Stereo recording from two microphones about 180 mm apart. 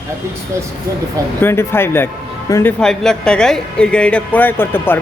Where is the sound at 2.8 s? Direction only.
5° left (ahead or behind).